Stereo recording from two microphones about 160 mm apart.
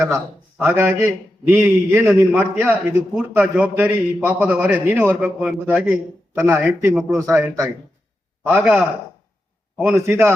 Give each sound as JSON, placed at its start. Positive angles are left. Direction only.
{"t": 0.6, "sound": "a man's voice", "side_deg": -10}
{"t": 10.1, "sound": "a man's voice", "side_deg": -15}